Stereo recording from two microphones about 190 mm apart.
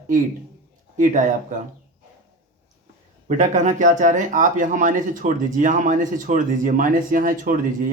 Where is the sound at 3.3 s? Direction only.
40° right (ahead or behind).